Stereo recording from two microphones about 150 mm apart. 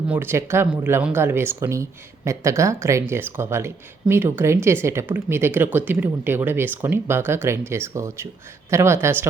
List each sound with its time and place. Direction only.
0.1 s speech: 15° right (ahead or behind)